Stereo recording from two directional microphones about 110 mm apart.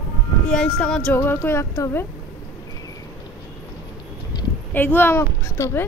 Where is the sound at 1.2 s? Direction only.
20° left (ahead or behind).